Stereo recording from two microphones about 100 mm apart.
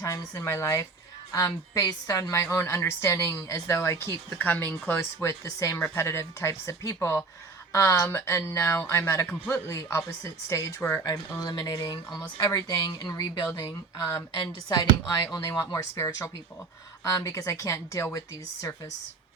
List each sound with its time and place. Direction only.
0.0 s a woman's voice: 35° left (ahead or behind)
11.0 s a woman's voice: 40° left (ahead or behind)
15.0 s a woman's voice: 45° left (ahead or behind)